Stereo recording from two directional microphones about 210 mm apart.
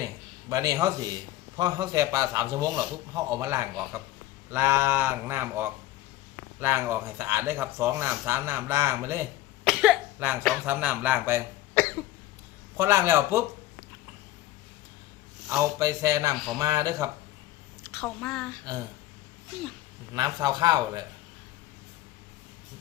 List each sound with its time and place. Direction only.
0.0 s a sound: 15° right (ahead or behind)
1.5 s speech: 20° right (ahead or behind)
9.6 s cough: 5° right (ahead or behind)
10.7 s speech: 10° right (ahead or behind)
12.7 s speech: 15° right (ahead or behind)
15.4 s speech: 15° right (ahead or behind)
17.8 s a woman's voice: 5° left (ahead or behind)
20.1 s speech: 20° right (ahead or behind)